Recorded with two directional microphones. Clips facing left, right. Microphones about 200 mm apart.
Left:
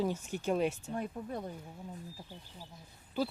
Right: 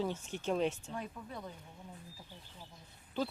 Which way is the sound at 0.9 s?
50° left (ahead or behind).